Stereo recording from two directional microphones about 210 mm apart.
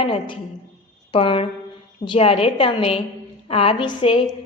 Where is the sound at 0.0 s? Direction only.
25° left (ahead or behind).